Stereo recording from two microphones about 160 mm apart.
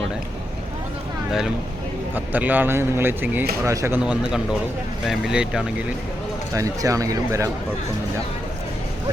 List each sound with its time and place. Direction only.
2.1 s a man's voice: 10° right (ahead or behind)
6.5 s speech: 20° right (ahead or behind)